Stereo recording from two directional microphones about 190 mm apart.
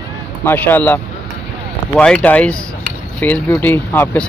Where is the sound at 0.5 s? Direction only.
10° left (ahead or behind).